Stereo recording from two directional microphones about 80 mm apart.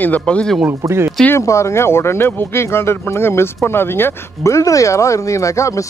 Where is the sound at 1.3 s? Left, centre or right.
Left.